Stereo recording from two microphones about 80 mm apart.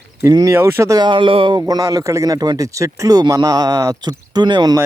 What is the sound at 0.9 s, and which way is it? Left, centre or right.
Speech, right.